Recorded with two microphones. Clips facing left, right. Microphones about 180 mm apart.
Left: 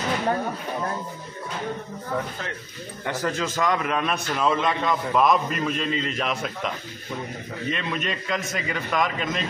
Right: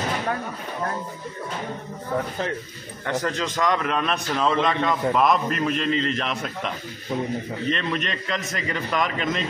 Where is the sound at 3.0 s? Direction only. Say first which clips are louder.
Right 1 dB; 5° left (ahead or behind).